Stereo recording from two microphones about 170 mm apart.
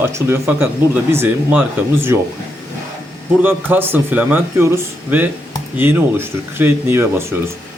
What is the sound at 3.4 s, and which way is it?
Speech, 10° right (ahead or behind).